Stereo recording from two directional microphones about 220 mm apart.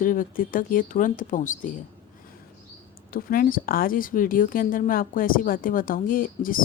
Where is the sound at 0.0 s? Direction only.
40° left (ahead or behind).